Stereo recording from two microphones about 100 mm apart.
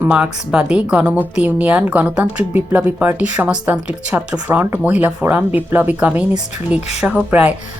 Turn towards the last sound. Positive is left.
turn(degrees=-15)  # may be behind; listen again after turning